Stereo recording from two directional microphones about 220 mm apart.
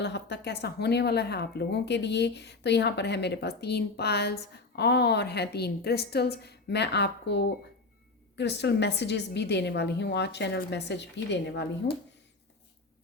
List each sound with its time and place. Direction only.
0.0 s speech: 50° left (ahead or behind)